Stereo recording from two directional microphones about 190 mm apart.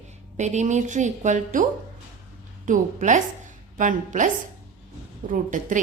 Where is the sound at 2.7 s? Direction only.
40° right (ahead or behind).